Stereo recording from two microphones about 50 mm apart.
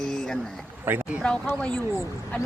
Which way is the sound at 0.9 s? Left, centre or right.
Right.